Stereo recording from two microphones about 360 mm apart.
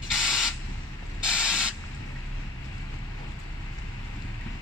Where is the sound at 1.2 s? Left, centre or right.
Centre.